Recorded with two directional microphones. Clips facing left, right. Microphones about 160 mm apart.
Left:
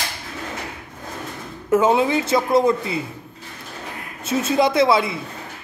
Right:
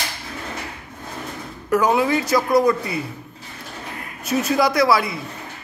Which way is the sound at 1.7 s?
25° left (ahead or behind).